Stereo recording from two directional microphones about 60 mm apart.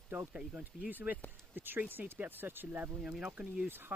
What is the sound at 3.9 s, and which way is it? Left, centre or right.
Speech, right.